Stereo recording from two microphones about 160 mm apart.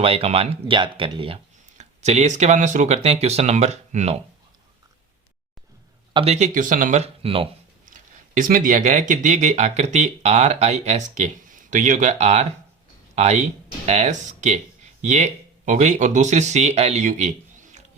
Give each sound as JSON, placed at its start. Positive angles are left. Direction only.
{"t": 0.0, "sound": "speech", "side_deg": -35}
{"t": 1.8, "sound": "speech", "side_deg": -45}
{"t": 6.1, "sound": "speech", "side_deg": -40}
{"t": 7.0, "sound": "speech", "side_deg": -35}
{"t": 7.9, "sound": "speech", "side_deg": -55}